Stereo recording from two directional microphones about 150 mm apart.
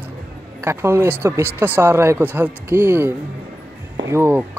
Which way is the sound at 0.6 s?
15° right (ahead or behind).